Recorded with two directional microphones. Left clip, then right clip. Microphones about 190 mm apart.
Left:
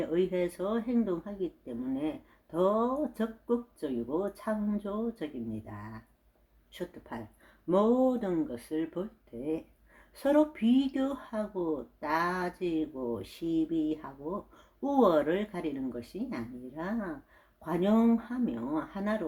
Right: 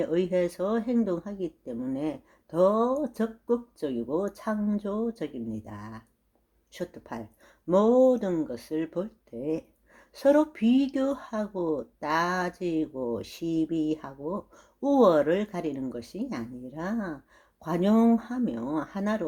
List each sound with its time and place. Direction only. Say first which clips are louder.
0.0 s speech: right 4 dB; 40° right (ahead or behind)
10.2 s speech: right 4 dB; 35° right (ahead or behind)